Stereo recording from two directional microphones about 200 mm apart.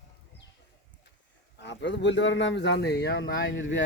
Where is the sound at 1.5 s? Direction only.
60° left (ahead or behind).